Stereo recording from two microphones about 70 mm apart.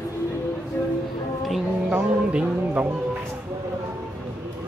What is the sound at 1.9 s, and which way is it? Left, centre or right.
Speech, centre.